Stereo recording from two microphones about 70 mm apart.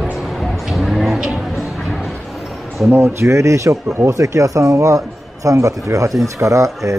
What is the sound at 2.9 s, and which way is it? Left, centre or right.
Speech, right.